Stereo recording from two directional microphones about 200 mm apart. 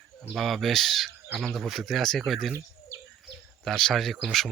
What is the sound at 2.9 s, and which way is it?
Bird, 15° right (ahead or behind).